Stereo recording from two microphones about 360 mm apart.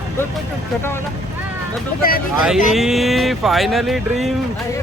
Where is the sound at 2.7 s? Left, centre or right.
Centre.